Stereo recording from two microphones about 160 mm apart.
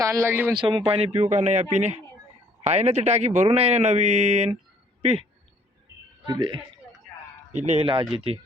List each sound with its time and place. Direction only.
0.0 s speech: 20° right (ahead or behind)
0.6 s a man's voice: 35° right (ahead or behind)
6.2 s speech: 30° right (ahead or behind)
7.5 s speech: 45° right (ahead or behind)